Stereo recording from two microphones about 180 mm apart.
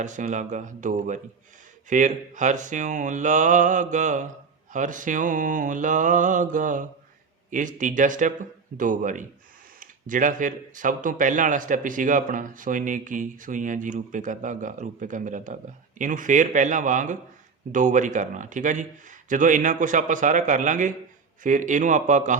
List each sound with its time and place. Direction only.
0.0 s speech: 45° right (ahead or behind)